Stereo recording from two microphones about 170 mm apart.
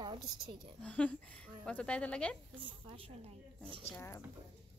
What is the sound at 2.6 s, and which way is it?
Speech, 30° right (ahead or behind).